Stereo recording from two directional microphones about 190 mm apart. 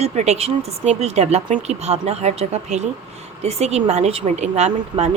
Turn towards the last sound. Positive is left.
turn(degrees=-35)  # may be behind; listen again after turning